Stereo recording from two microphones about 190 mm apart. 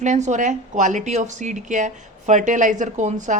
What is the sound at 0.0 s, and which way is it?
Speech, 40° right (ahead or behind).